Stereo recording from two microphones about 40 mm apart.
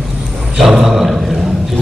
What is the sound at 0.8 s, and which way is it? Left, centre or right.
Speech, centre.